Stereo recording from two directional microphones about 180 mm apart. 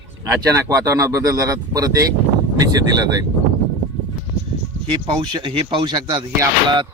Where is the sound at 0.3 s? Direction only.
20° right (ahead or behind).